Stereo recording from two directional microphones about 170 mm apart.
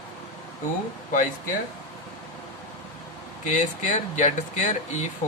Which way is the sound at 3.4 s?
45° left (ahead or behind).